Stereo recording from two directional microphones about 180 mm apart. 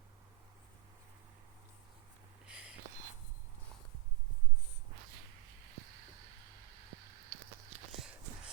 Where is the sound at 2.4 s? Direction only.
5° right (ahead or behind).